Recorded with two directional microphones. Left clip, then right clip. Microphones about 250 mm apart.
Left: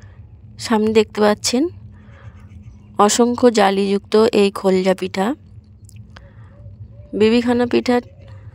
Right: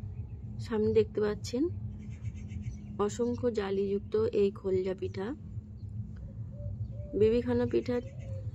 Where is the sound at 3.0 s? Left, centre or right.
Left.